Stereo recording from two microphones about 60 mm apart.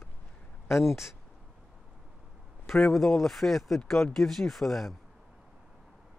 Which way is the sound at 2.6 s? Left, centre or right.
Centre.